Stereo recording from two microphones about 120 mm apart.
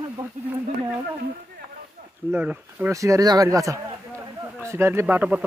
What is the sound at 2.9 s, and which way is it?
Speech, 25° right (ahead or behind).